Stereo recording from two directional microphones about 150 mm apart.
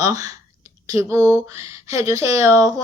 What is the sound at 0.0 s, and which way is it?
Speech, 25° right (ahead or behind).